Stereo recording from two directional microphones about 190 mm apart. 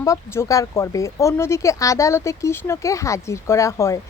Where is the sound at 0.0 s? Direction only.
15° left (ahead or behind).